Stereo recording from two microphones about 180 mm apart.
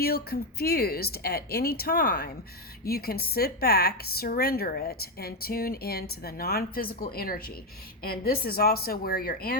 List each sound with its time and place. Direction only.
0.0 s a woman's voice: 60° left (ahead or behind)